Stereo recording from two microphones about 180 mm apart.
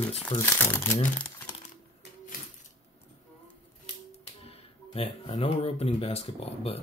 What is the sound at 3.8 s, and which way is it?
Speech, 35° left (ahead or behind).